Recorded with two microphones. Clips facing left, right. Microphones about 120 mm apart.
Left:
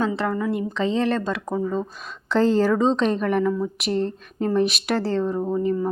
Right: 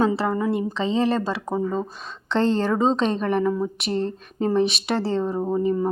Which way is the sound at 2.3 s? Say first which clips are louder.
Left 2 dB; 5° left (ahead or behind).